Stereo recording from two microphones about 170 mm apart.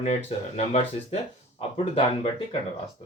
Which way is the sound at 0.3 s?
40° left (ahead or behind).